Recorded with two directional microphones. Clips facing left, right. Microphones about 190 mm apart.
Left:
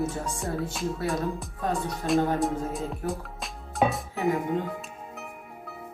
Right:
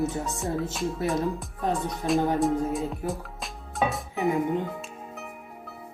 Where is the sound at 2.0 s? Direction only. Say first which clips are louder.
Right 1 dB; centre (ahead or behind).